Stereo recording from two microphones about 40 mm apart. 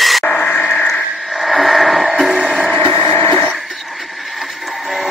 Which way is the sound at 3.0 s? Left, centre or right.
Left.